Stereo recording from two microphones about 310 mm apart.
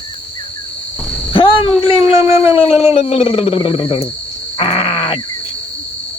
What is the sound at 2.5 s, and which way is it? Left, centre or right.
Speech, centre.